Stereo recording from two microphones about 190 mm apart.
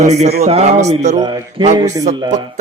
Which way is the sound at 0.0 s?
35° right (ahead or behind).